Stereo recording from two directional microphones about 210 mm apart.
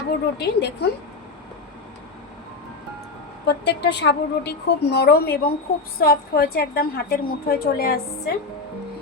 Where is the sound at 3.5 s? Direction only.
55° left (ahead or behind).